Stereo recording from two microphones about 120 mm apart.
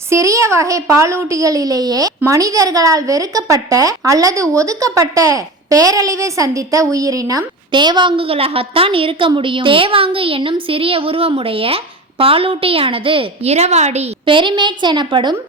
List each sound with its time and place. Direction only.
0.1 s a woman's voice: 25° right (ahead or behind); by 14.1 s 70° right (ahead or behind)
14.3 s a woman's voice: 45° right (ahead or behind)